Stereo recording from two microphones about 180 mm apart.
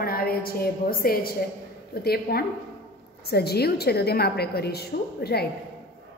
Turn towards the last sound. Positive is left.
turn(degrees=60)  # may be behind; listen again after turning